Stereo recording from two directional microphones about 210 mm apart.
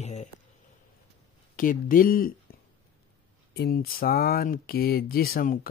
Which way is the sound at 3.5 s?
45° left (ahead or behind).